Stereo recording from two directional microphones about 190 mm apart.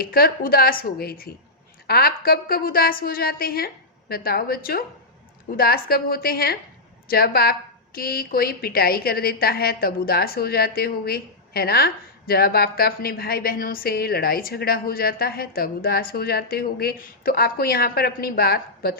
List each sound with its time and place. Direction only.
0.0 s a woman's voice: 50° left (ahead or behind)